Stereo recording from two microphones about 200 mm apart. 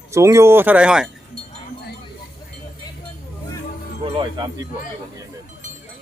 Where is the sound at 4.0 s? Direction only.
20° right (ahead or behind).